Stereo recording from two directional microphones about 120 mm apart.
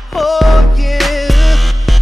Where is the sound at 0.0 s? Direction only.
Centre (ahead or behind).